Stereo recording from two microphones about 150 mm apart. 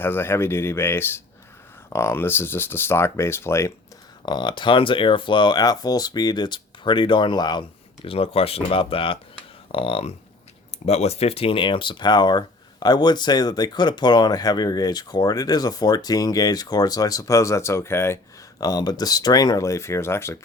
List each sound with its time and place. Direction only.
0.0 s speech: 15° left (ahead or behind)
4.3 s speech: 30° left (ahead or behind)